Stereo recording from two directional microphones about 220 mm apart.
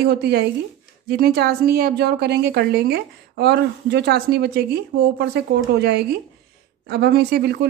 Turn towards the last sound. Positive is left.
turn(degrees=-45)  # may be behind; listen again after turning